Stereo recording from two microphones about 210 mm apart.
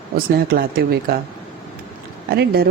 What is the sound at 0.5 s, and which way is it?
Speech, 45° right (ahead or behind).